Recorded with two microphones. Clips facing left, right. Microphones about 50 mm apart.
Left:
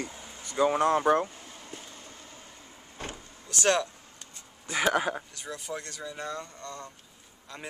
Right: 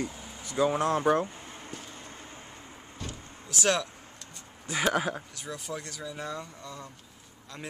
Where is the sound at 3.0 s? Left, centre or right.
Left.